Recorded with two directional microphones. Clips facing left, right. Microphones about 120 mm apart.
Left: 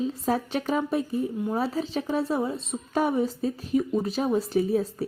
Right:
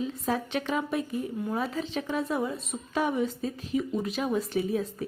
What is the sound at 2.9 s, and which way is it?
A woman's voice, 40° left (ahead or behind).